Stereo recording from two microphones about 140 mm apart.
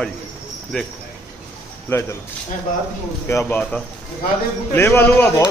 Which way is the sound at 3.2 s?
15° left (ahead or behind).